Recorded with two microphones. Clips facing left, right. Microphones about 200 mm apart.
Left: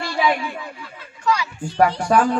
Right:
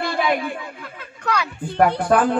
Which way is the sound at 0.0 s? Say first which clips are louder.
Even; 55° right (ahead or behind).